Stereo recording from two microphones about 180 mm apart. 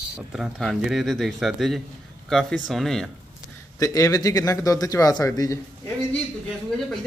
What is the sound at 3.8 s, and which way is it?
A man's voice, 20° left (ahead or behind).